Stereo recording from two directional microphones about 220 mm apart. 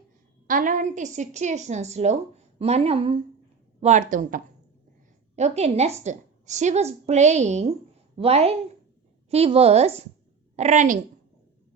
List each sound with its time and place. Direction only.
0.4 s a woman's voice: 40° right (ahead or behind)